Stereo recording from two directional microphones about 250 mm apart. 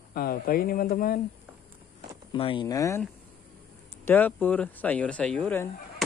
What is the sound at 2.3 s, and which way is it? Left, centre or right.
Speech, centre.